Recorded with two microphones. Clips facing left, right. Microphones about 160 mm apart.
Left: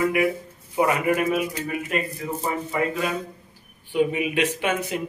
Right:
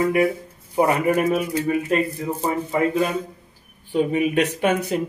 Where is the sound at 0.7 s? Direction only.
35° right (ahead or behind).